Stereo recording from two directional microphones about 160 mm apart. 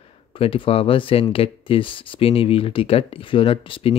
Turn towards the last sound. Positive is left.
turn(degrees=35)  # may be behind; listen again after turning